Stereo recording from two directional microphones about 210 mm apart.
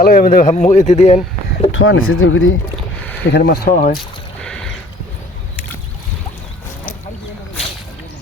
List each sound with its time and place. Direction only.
0.0 s a man's voice: 45° left (ahead or behind)
1.7 s speech: 65° left (ahead or behind)
3.3 s speech: 50° left (ahead or behind)